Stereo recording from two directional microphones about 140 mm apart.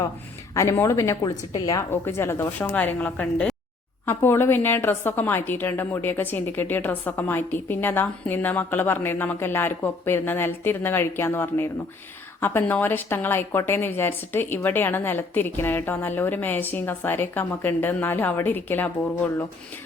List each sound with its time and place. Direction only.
0.5 s a woman's voice: 20° left (ahead or behind)